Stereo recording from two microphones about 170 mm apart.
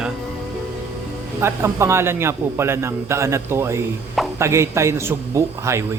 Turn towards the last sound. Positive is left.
turn(degrees=-15)  # may be behind; listen again after turning